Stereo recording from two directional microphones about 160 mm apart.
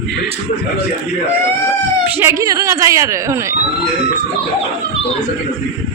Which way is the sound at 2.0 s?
15° right (ahead or behind).